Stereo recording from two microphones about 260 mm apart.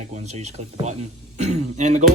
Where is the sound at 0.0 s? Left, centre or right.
Right.